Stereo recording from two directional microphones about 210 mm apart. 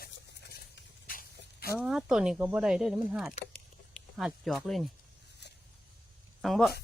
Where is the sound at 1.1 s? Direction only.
45° left (ahead or behind).